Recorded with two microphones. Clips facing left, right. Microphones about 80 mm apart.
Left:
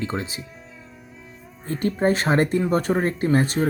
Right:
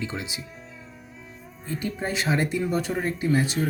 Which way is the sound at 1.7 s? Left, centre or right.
Left.